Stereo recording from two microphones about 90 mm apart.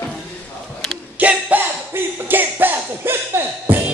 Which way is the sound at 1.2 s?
15° right (ahead or behind).